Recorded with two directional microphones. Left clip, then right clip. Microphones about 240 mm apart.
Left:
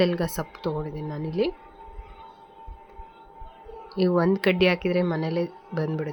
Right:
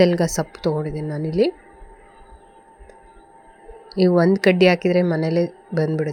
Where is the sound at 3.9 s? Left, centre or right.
Centre.